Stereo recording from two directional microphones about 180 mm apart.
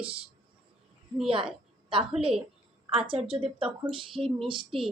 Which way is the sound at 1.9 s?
30° right (ahead or behind).